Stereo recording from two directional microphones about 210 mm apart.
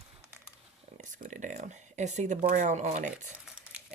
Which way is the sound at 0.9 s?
40° right (ahead or behind).